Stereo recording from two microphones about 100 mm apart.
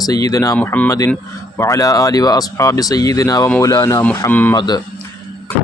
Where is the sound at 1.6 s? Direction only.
35° left (ahead or behind).